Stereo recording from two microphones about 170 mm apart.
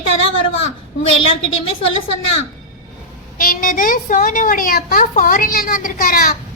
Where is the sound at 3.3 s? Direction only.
55° left (ahead or behind).